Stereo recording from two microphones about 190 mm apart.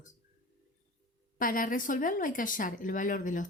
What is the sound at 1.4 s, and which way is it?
Speech, 45° left (ahead or behind).